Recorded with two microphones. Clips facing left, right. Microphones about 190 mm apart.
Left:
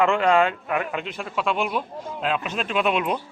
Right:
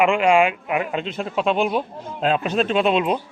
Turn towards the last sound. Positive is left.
turn(degrees=-25)  # may be behind; listen again after turning